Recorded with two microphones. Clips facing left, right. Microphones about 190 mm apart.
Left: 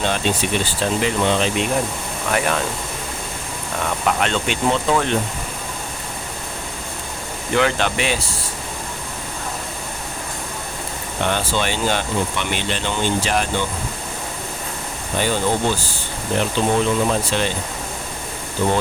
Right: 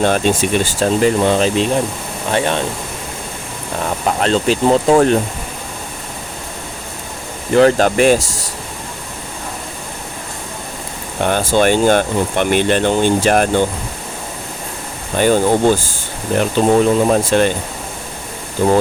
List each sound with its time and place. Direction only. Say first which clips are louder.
0.0 s speech: right 6 dB; 50° right (ahead or behind); by 2.6 s 30° right (ahead or behind)
3.8 s speech: right 4 dB; 35° right (ahead or behind)
7.5 s speech: right 8 dB; 40° right (ahead or behind)
11.2 s speech: right 7 dB; 45° right (ahead or behind)
15.2 s speech: right 8 dB; 45° right (ahead or behind)